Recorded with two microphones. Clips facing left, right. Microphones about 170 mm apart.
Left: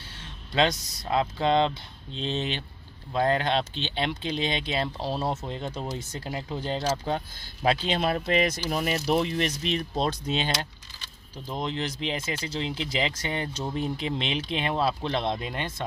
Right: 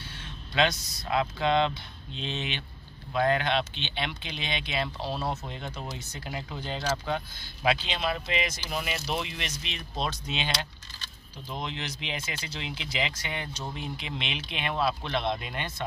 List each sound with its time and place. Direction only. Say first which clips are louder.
0.6 s speech: left 2 dB; 35° left (ahead or behind)